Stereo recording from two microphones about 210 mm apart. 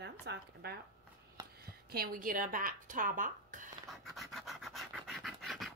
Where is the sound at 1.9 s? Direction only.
45° right (ahead or behind).